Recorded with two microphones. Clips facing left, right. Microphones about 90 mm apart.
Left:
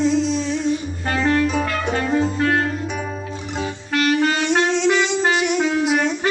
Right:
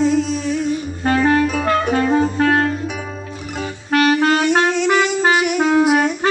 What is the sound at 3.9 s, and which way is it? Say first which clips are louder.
Music: right 4 dB; 50° right (ahead or behind).